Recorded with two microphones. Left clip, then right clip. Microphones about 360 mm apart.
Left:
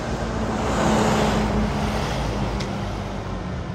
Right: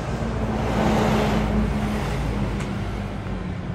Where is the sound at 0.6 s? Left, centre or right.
Left.